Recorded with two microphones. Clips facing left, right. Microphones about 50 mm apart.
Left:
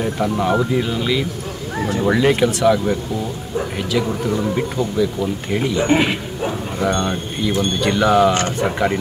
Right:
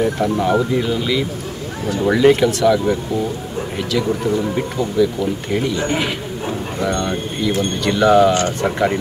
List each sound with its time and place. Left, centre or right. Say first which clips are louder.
0.0 s speech: right 2 dB; centre
5.9 s a man's voice: left 4 dB; left
7.8 s speech: right 2 dB; centre